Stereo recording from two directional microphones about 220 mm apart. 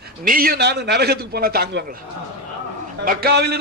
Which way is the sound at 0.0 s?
40° right (ahead or behind).